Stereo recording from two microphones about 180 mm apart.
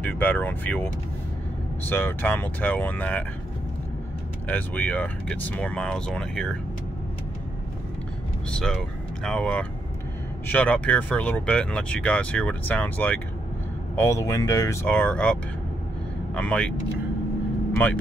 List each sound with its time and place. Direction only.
0.0 s speech: 10° left (ahead or behind)
1.9 s speech: 10° left (ahead or behind)
4.5 s speech: 10° left (ahead or behind)
8.5 s speech: 5° left (ahead or behind)
16.3 s speech: 5° left (ahead or behind)